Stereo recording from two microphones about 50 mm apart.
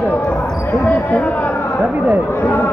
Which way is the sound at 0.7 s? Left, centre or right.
Left.